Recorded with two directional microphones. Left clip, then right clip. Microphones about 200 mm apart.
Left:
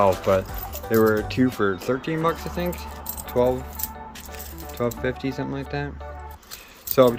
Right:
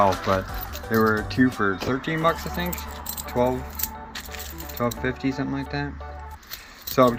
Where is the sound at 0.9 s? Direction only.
30° left (ahead or behind).